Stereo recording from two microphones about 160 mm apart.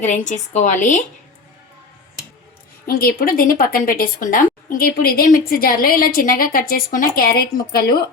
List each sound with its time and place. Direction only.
0.0 s a woman's voice: 45° left (ahead or behind)
2.8 s a woman's voice: 65° left (ahead or behind)